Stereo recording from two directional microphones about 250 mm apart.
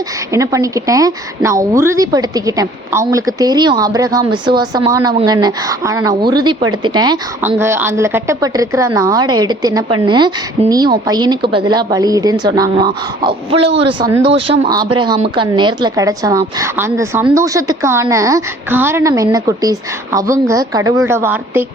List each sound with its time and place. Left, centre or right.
0.3 s a woman's voice: centre